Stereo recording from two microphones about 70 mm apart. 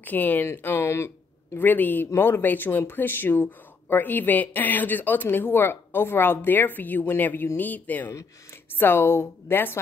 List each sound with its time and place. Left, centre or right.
0.0 s speech: left
0.5 s speech: left
1.6 s a woman's voice: left